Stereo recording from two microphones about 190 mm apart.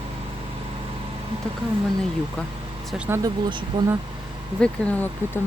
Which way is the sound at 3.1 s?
15° right (ahead or behind).